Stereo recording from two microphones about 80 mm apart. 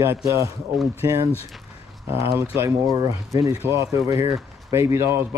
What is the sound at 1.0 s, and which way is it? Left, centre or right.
A man's voice, right.